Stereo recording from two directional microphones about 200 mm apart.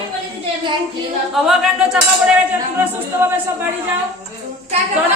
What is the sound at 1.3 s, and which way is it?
A capella, centre (ahead or behind).